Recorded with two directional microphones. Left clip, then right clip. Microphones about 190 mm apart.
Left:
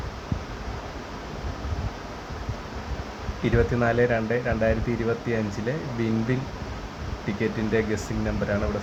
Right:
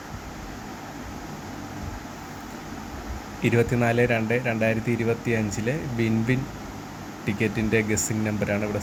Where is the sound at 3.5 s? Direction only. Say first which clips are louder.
Right 1 dB; 15° right (ahead or behind).